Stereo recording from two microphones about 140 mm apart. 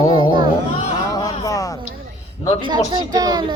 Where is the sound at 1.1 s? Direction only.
25° left (ahead or behind).